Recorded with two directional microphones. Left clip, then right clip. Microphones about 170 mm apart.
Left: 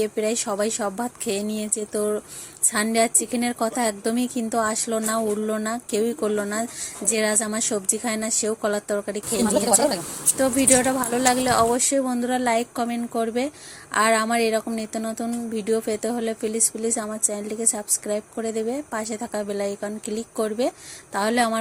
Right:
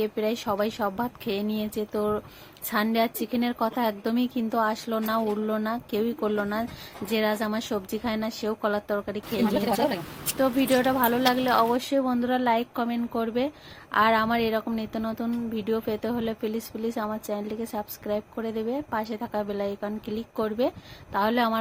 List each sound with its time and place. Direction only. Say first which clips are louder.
0.0 s speech: left 3 dB; 15° left (ahead or behind)
9.6 s a woman's voice: left 5 dB; centre (ahead or behind)
10.3 s speech: left 3 dB; 15° left (ahead or behind)